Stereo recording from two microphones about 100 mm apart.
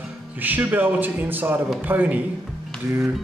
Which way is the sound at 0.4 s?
20° right (ahead or behind).